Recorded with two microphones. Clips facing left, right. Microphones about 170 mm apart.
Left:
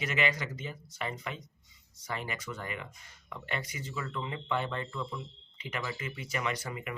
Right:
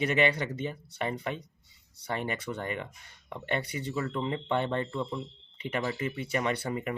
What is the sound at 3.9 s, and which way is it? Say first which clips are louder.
Speech: right 6 dB; 35° right (ahead or behind).